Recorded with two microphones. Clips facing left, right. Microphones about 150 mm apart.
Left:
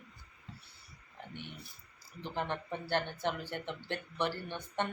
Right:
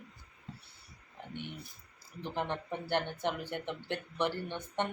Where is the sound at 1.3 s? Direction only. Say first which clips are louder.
Right 5 dB; 20° right (ahead or behind).